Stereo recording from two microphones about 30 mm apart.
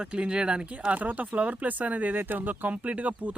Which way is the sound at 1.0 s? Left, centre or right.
Right.